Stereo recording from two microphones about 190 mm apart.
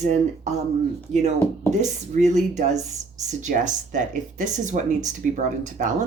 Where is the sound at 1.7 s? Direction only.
40° right (ahead or behind).